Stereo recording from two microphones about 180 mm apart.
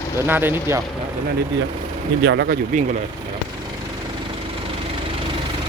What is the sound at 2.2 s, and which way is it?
Speech, 70° right (ahead or behind).